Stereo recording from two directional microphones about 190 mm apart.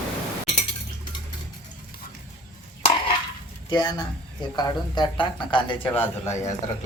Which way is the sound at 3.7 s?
20° left (ahead or behind).